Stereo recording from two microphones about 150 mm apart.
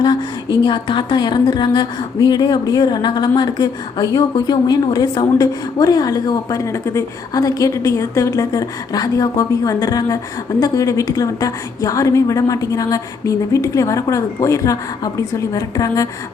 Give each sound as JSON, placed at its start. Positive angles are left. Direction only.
{"t": 0.0, "sound": "speech", "side_deg": 30}